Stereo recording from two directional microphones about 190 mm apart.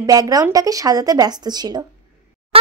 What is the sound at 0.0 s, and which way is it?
A child's voice, 20° right (ahead or behind).